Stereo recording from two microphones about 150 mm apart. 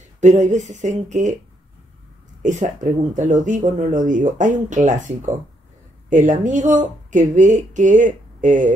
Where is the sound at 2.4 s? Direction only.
55° right (ahead or behind).